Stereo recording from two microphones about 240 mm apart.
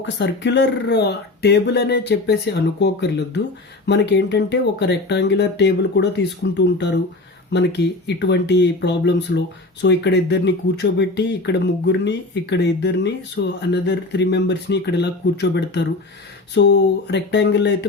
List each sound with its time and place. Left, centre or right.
0.0 s speech: left